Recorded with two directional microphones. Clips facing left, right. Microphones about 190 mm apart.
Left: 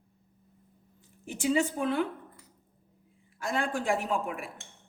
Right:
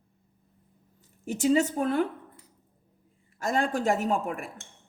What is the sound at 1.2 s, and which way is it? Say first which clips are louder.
Speech: right 4 dB; 40° right (ahead or behind).